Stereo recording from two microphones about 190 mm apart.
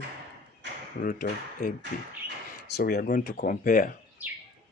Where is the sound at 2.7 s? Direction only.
60° left (ahead or behind).